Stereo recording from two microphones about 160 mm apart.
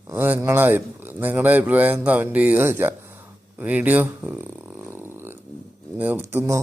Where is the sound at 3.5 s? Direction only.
10° right (ahead or behind).